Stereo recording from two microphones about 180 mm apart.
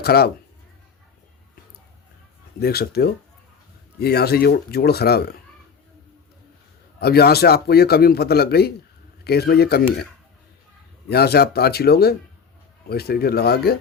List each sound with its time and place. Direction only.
0.0 s a man's voice: 60° left (ahead or behind)
2.6 s a man's voice: 60° left (ahead or behind)
7.0 s a man's voice: 60° left (ahead or behind)
11.1 s a man's voice: 60° left (ahead or behind)